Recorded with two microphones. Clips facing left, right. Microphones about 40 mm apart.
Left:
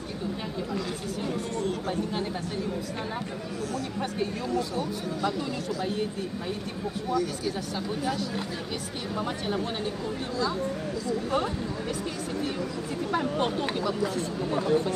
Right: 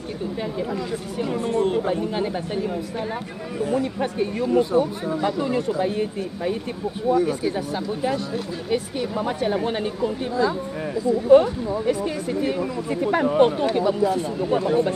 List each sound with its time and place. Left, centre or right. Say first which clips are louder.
1.3 s speech: right 11 dB; right
3.7 s speech: right 9 dB; right
11.1 s speech: right 14 dB; right